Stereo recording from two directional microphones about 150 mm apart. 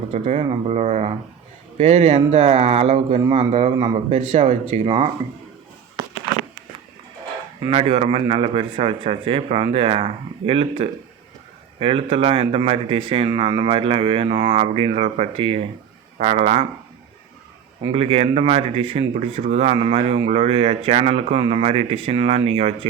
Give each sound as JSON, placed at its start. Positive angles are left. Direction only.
{"t": 0.1, "sound": "a man's voice", "side_deg": -45}
{"t": 3.7, "sound": "speech", "side_deg": -35}
{"t": 7.7, "sound": "a man's voice", "side_deg": -40}
{"t": 17.9, "sound": "speech", "side_deg": -40}